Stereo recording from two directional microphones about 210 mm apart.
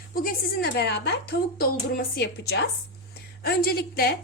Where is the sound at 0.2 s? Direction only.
45° left (ahead or behind).